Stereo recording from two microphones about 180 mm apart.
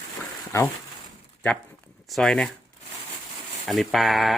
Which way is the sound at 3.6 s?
Centre (ahead or behind).